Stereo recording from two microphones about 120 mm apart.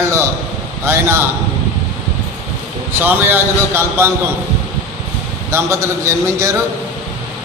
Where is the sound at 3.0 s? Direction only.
15° right (ahead or behind).